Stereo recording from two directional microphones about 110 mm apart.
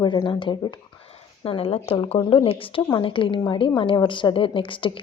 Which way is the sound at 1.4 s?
60° left (ahead or behind).